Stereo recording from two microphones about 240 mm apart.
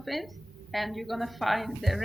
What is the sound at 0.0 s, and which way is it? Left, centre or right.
A woman's voice, centre.